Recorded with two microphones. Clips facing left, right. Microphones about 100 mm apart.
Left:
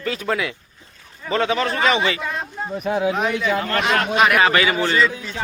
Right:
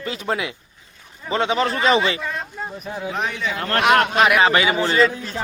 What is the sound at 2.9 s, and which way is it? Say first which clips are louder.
Speech: left 10 dB; 80° left.